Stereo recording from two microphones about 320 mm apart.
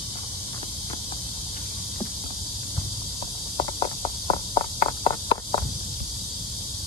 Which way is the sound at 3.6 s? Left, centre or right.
Centre.